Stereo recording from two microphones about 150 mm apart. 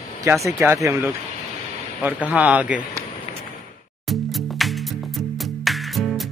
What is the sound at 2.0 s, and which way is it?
Speech, 10° right (ahead or behind).